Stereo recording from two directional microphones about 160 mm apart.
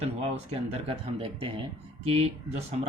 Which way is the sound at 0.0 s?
40° right (ahead or behind).